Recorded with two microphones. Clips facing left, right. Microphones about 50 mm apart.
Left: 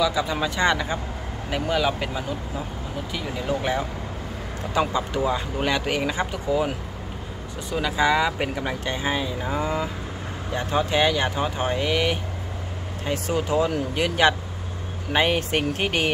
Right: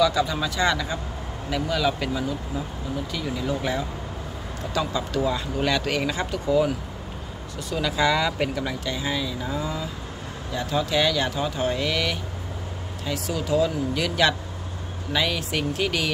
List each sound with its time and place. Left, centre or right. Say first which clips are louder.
0.0 s speech: right 2 dB; centre
0.3 s speech: left 2 dB; left
7.7 s speech: left 1 dB; left
8.8 s speech: left 2 dB; left
15.1 s speech: left 4 dB; left